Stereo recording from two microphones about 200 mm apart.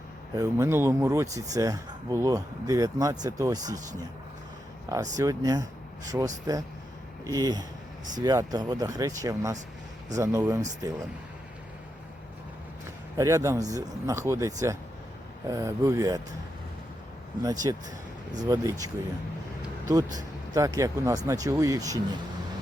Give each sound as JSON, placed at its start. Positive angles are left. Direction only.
{"t": 0.3, "sound": "speech", "side_deg": -15}
{"t": 13.1, "sound": "speech", "side_deg": -15}
{"t": 17.4, "sound": "speech", "side_deg": -20}
{"t": 20.5, "sound": "speech", "side_deg": -15}